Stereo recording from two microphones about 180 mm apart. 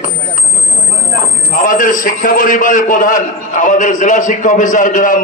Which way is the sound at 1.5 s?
50° left (ahead or behind).